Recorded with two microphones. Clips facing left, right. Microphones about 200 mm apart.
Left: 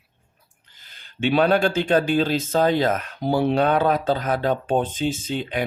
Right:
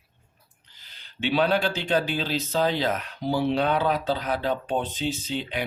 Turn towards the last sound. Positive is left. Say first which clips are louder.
# left 4 dB
turn(degrees=50)  # may be behind; listen again after turning